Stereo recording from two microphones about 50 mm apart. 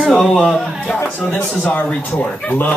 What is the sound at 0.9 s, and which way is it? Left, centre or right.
Speech, left.